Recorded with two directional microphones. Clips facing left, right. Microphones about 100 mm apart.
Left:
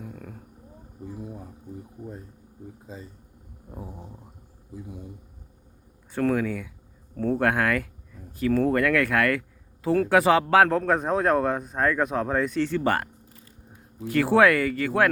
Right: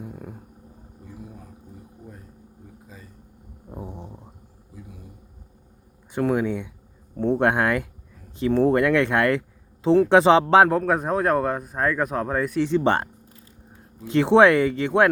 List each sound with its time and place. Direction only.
0.0 s a sound: 15° right (ahead or behind)
1.0 s a sound: 20° left (ahead or behind)
2.8 s speech: 25° left (ahead or behind)
3.7 s speech: 25° right (ahead or behind)
4.7 s speech: 25° left (ahead or behind)
6.1 s speech: 20° right (ahead or behind)
10.7 s speech: 5° right (ahead or behind)
12.6 s speech: 20° right (ahead or behind)
14.1 s speech: 20° right (ahead or behind)